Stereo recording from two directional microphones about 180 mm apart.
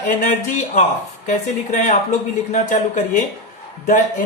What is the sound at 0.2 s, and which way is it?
Speech, 40° left (ahead or behind).